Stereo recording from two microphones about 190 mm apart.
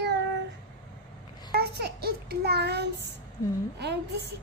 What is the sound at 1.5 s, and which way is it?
A child's voice, 55° right (ahead or behind).